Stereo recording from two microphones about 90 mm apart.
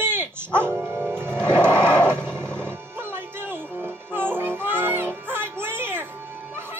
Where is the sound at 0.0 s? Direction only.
25° right (ahead or behind).